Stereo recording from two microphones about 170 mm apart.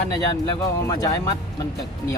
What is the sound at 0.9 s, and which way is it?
Speech, 20° left (ahead or behind).